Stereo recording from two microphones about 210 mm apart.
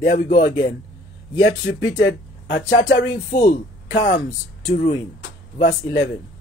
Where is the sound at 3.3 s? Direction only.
35° left (ahead or behind).